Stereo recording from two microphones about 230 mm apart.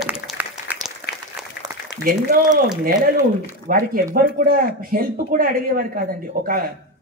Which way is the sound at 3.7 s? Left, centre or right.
Right.